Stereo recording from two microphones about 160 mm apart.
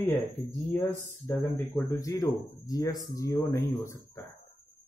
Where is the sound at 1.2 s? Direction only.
15° left (ahead or behind).